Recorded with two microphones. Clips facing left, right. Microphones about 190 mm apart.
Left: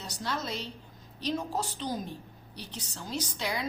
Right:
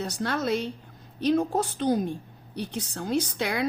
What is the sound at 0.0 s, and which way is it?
A woman's voice, 55° right (ahead or behind).